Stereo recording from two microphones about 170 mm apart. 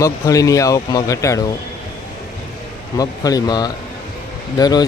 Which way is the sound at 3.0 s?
20° left (ahead or behind).